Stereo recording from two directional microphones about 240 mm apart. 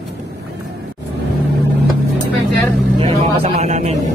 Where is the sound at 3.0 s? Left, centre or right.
Right.